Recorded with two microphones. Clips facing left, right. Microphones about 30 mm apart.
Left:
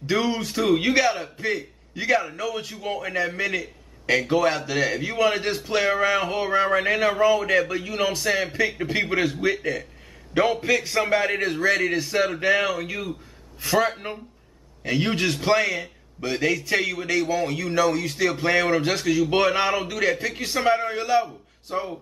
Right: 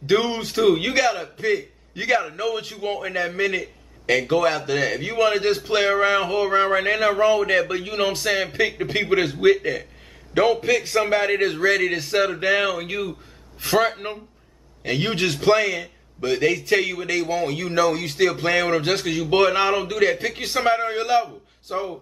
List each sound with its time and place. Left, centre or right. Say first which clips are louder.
0.1 s a man's voice: right 3 dB; centre
0.6 s a man's voice: right 2 dB; centre; by 3.1 s right
3.1 s a man's voice: right 1 dB; centre
10.3 s a man's voice: right 2 dB; centre
11.1 s a man's voice: right 2 dB; centre
21.7 s a man's voice: right 1 dB; centre